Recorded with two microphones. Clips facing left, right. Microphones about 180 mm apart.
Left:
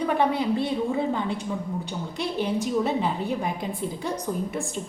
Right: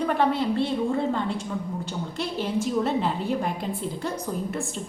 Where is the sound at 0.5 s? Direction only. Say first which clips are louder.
Right 1 dB; 5° left (ahead or behind).